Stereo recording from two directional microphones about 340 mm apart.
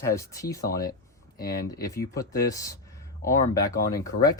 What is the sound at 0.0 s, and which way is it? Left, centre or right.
Speech, centre.